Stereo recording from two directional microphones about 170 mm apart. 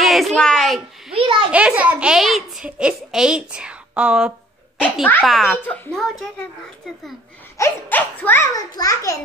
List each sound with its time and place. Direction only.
0.0 s a child's voice: centre (ahead or behind)
1.1 s a child's voice: 30° right (ahead or behind)
1.5 s a child's voice: 5° right (ahead or behind)
4.7 s a child's voice: 10° left (ahead or behind)
7.5 s a child's voice: 15° left (ahead or behind)